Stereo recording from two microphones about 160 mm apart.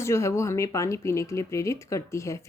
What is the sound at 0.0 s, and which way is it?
Speech, 15° left (ahead or behind).